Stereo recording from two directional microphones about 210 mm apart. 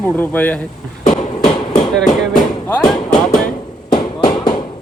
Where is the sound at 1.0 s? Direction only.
35° left (ahead or behind).